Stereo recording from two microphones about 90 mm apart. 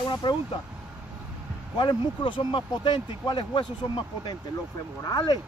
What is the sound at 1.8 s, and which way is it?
Speech, 65° left (ahead or behind).